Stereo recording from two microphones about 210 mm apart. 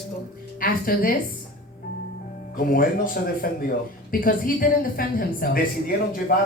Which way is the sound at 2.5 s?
45° left (ahead or behind).